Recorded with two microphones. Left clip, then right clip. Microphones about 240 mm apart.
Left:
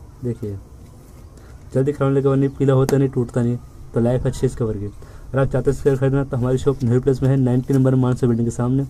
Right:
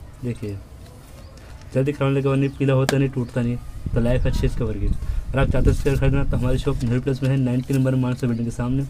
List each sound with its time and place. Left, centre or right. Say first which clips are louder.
1.7 s speech: left 3 dB; centre